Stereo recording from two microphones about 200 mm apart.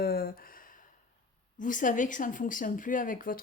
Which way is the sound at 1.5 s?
40° left (ahead or behind).